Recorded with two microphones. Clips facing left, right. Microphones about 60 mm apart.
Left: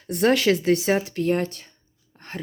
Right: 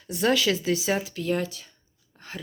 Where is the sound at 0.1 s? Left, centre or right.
Left.